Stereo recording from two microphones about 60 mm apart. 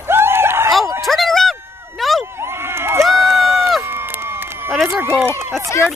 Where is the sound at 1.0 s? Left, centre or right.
Centre.